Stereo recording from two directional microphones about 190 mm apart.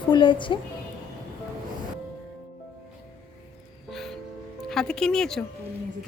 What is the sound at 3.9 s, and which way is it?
Music, centre (ahead or behind).